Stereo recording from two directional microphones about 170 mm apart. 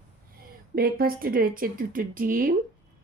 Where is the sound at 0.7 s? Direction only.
60° right (ahead or behind).